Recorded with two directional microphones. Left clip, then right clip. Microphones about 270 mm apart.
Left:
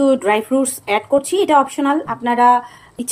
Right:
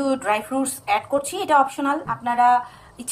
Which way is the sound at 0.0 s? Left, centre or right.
Centre.